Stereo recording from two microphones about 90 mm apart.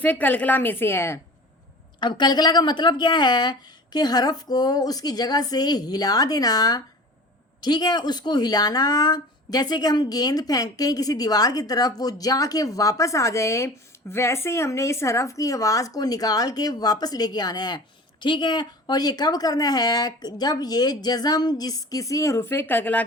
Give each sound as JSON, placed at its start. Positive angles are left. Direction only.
{"t": 0.0, "sound": "a woman's voice", "side_deg": 20}
{"t": 2.0, "sound": "speech", "side_deg": 55}